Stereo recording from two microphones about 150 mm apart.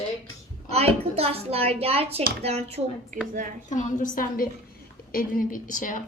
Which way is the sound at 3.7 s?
60° left (ahead or behind).